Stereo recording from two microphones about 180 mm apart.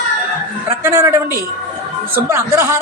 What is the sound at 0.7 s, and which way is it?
Speech, 15° right (ahead or behind).